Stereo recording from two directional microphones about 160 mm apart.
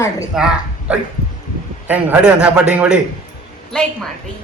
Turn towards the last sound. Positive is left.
turn(degrees=5)  # may be behind; listen again after turning